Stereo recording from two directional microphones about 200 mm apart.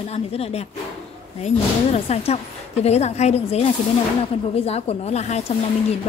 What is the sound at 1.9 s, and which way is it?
A woman's voice, 30° left (ahead or behind).